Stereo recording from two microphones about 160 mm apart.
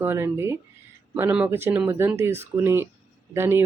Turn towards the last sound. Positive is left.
turn(degrees=-15)  # may be behind; listen again after turning